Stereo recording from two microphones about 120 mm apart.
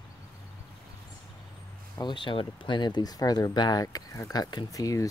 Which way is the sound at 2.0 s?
40° left (ahead or behind).